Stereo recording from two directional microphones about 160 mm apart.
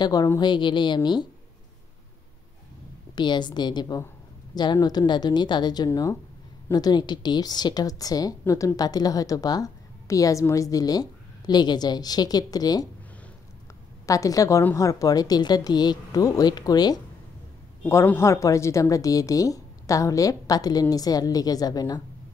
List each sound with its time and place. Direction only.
0.0 s a woman's voice: 25° left (ahead or behind)
3.2 s a woman's voice: 25° left (ahead or behind)
14.0 s a woman's voice: 20° left (ahead or behind)